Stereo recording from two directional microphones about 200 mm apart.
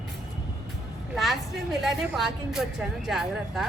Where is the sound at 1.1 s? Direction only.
Centre (ahead or behind).